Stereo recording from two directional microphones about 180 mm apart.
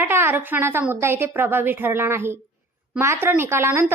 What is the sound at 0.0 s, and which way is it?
A woman's voice, 15° right (ahead or behind).